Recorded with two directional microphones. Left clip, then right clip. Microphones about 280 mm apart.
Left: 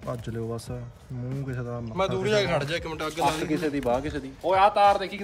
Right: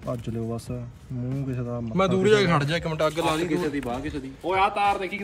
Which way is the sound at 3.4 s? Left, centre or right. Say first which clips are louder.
Even; left.